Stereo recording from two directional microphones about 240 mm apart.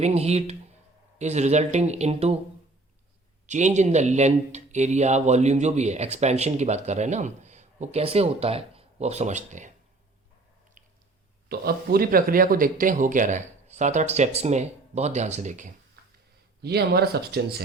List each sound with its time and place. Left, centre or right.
0.0 s speech: right
3.4 s speech: right
10.8 s squish: right
11.4 s speech: right
16.6 s speech: right